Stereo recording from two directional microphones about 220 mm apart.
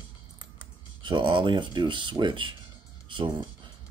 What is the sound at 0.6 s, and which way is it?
Speech, 20° right (ahead or behind).